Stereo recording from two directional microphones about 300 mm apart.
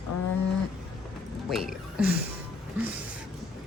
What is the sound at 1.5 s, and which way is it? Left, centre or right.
Speech, centre.